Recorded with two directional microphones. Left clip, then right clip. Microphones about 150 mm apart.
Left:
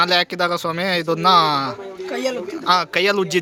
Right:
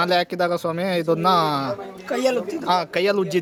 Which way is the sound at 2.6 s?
5° right (ahead or behind).